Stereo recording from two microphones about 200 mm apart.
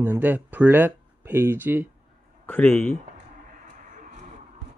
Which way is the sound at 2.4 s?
10° left (ahead or behind).